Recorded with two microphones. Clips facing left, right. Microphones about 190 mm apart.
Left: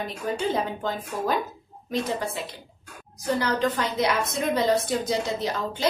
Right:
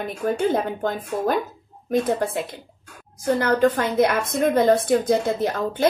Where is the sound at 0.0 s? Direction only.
55° right (ahead or behind).